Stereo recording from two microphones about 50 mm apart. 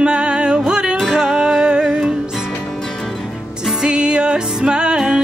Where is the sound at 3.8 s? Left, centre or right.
Centre.